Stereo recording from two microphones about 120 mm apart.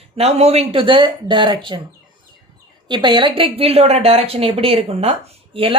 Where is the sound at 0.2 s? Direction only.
60° right (ahead or behind); by 1.8 s 40° right (ahead or behind).